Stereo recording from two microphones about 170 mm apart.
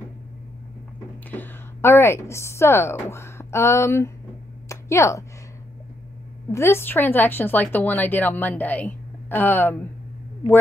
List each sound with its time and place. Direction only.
1.3 s speech: 15° left (ahead or behind)
4.6 s a sound: 15° left (ahead or behind)
6.5 s speech: 15° left (ahead or behind)